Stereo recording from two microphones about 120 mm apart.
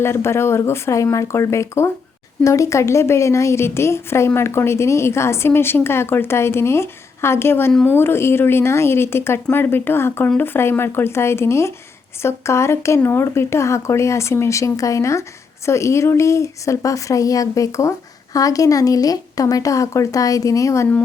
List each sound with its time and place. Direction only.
0.0 s speech: 20° left (ahead or behind)